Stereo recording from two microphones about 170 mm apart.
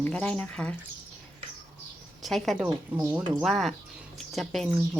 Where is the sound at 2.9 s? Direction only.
20° right (ahead or behind).